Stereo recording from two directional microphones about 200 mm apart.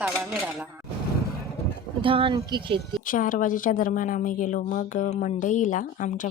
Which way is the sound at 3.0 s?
40° left (ahead or behind).